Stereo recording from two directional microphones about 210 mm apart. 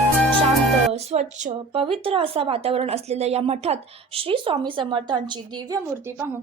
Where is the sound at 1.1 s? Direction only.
35° right (ahead or behind).